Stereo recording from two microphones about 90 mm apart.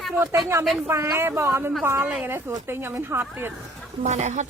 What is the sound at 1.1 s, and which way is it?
Speech, 30° right (ahead or behind).